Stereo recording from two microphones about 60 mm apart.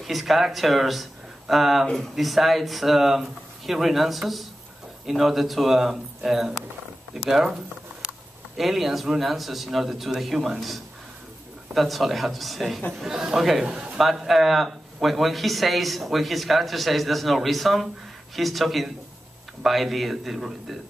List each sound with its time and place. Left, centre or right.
0.0 s speech: centre
8.5 s speech: centre
13.7 s a man's voice: centre
13.9 s speech: centre